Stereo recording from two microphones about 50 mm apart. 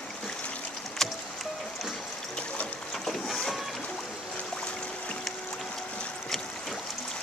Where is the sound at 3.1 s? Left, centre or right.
Centre.